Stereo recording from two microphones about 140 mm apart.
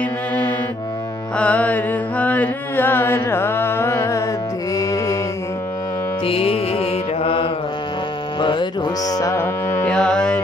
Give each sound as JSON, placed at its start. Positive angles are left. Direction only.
{"t": 1.4, "sound": "mantra", "side_deg": 10}
{"t": 4.7, "sound": "music", "side_deg": 25}
{"t": 6.2, "sound": "music", "side_deg": 45}
{"t": 8.4, "sound": "a sound", "side_deg": 35}
{"t": 9.3, "sound": "carnatic music", "side_deg": 20}
{"t": 9.8, "sound": "music", "side_deg": 5}